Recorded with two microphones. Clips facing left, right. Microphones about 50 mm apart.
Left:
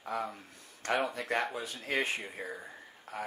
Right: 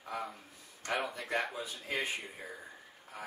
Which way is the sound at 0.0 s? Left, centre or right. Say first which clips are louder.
Left 4 dB; left.